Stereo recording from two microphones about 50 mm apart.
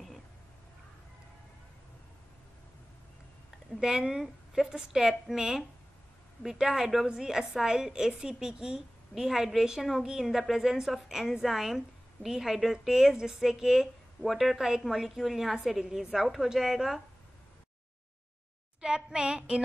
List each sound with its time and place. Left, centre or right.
3.8 s a woman's voice: centre
18.8 s a woman's voice: centre